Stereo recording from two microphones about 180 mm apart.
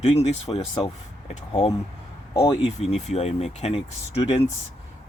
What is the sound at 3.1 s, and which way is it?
Speech, 35° left (ahead or behind).